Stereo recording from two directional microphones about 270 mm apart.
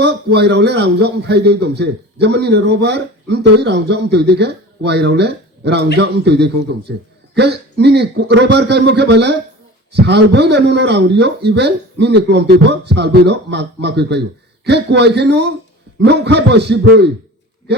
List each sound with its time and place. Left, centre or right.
0.0 s a man's voice: right